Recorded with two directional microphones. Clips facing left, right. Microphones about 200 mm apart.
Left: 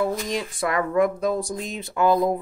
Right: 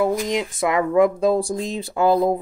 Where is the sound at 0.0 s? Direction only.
20° right (ahead or behind).